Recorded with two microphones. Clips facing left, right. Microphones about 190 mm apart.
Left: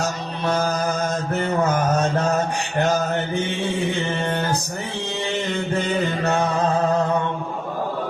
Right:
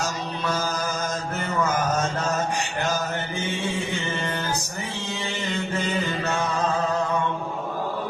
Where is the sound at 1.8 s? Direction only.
60° left (ahead or behind).